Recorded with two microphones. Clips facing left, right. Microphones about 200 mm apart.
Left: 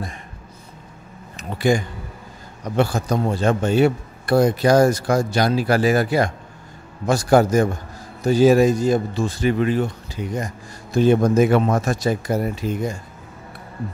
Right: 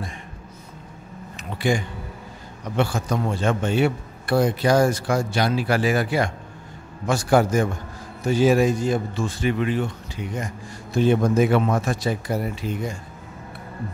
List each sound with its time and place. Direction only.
1.3 s speech: 40° left (ahead or behind)